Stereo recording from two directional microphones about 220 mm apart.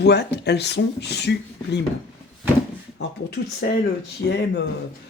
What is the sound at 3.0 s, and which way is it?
Speech, 50° left (ahead or behind).